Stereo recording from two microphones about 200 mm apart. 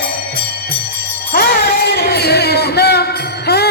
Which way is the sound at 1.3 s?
50° left (ahead or behind).